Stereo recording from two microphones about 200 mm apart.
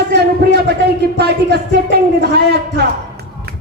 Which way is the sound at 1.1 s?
55° right (ahead or behind).